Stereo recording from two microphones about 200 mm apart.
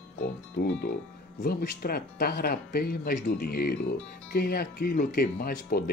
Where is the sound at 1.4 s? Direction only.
50° left (ahead or behind).